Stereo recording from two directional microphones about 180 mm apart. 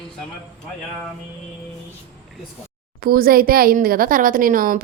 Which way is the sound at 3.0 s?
55° right (ahead or behind).